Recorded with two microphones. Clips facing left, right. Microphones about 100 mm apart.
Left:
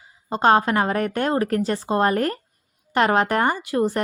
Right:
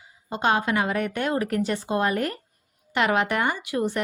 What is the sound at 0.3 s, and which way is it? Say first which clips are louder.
Speech: left 6 dB; 35° left (ahead or behind).